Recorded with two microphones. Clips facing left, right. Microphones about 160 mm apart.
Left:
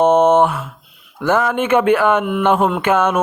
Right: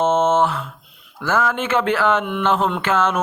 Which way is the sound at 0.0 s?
15° left (ahead or behind).